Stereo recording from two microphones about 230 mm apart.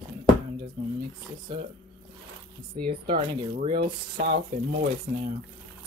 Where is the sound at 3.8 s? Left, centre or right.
Right.